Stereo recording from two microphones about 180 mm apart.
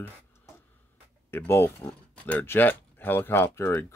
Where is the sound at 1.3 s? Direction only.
15° left (ahead or behind).